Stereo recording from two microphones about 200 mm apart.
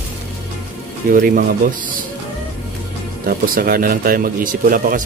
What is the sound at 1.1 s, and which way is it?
Speech, 45° right (ahead or behind).